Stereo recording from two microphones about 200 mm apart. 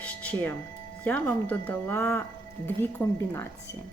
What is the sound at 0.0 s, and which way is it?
Music, 5° left (ahead or behind).